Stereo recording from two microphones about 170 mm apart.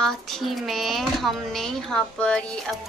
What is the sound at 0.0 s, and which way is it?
A woman's voice, centre (ahead or behind).